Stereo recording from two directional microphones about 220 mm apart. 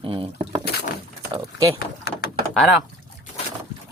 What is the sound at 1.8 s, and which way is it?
Door, 45° left (ahead or behind).